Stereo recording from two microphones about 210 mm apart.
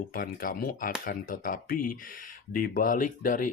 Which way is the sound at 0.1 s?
40° left (ahead or behind).